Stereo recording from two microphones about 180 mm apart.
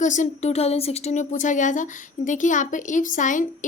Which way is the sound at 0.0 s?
45° left (ahead or behind).